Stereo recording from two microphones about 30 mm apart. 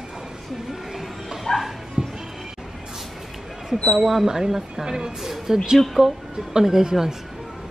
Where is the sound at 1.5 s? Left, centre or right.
Left.